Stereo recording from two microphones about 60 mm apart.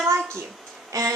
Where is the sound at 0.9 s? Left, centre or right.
Right.